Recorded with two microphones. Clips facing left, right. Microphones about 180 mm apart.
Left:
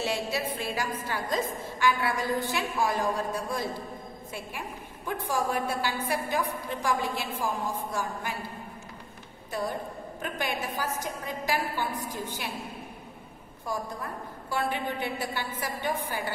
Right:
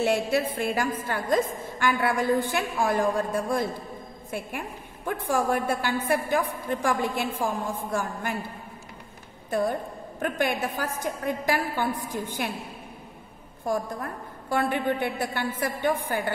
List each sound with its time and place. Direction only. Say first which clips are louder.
0.0 s a woman's voice: right 6 dB; 55° right (ahead or behind)
10.2 s a woman's voice: right 6 dB; 50° right (ahead or behind)
14.5 s a woman's voice: right 5 dB; 55° right (ahead or behind)